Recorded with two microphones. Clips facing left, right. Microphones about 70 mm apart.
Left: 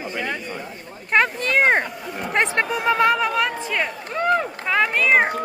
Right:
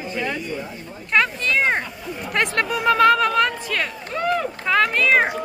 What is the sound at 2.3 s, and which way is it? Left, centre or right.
Speech, left.